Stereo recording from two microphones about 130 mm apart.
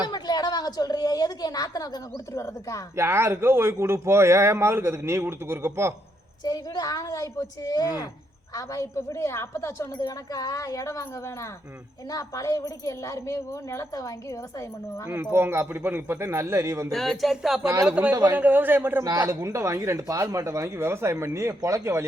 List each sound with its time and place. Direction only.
0.1 s a woman's voice: 35° left (ahead or behind)
2.9 s speech: 20° right (ahead or behind)
6.4 s speech: 30° left (ahead or behind)
15.0 s speech: 15° right (ahead or behind)
16.9 s a man's voice: centre (ahead or behind); by 19.0 s 15° right (ahead or behind)
19.0 s speech: 25° right (ahead or behind)